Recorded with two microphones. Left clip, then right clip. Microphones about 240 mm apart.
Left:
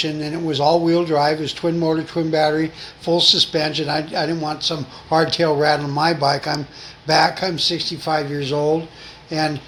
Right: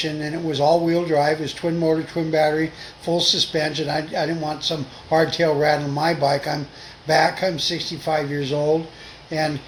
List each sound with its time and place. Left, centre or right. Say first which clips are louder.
0.0 s speech: left 2 dB; left